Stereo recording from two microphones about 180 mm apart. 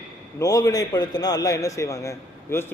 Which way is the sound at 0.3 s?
20° left (ahead or behind).